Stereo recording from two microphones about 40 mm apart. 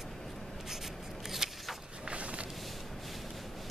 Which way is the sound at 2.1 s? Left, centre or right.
Right.